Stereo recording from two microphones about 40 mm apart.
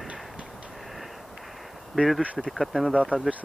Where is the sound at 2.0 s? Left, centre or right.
Centre.